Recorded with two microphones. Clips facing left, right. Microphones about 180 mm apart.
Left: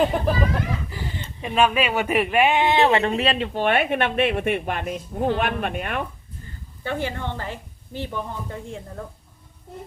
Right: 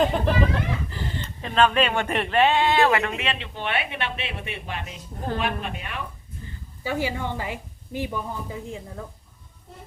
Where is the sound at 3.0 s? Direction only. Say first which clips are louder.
Left 6 dB; 35° left (ahead or behind); by 6.1 s 55° left (ahead or behind).